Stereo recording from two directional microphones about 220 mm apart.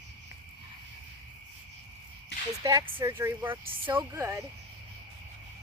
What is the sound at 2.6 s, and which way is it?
Speech, 15° right (ahead or behind).